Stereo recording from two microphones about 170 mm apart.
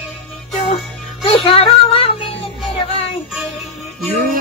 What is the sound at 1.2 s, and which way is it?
Music, 35° left (ahead or behind).